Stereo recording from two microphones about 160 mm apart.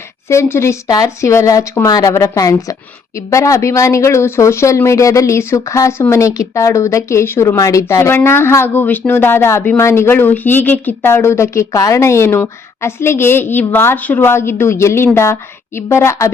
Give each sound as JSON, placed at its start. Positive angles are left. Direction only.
{"t": 0.3, "sound": "speech", "side_deg": 15}